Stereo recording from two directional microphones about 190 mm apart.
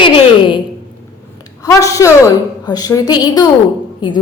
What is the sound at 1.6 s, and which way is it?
A woman's voice, 15° left (ahead or behind).